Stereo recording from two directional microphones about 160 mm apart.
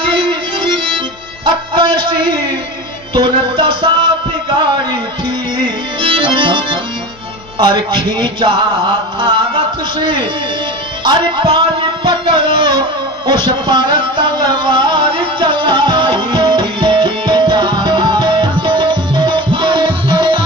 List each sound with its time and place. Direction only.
0.1 s music: 30° right (ahead or behind)
6.0 s accordion: 30° right (ahead or behind)
7.5 s mantra: 30° right (ahead or behind)
11.1 s music: 30° right (ahead or behind)